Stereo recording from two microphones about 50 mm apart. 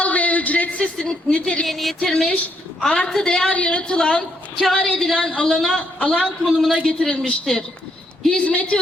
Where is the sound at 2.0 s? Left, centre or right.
Centre.